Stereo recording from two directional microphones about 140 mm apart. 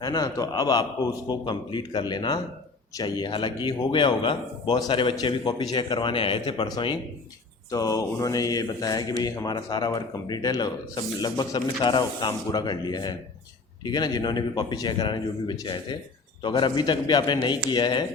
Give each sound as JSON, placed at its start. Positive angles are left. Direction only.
{"t": 0.0, "sound": "speech", "side_deg": 25}